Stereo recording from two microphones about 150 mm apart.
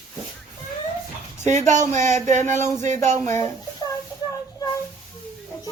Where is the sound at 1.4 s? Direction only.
50° right (ahead or behind).